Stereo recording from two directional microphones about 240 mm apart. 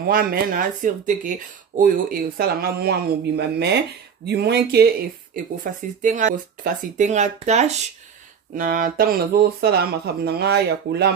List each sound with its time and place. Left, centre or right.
0.1 s speech: right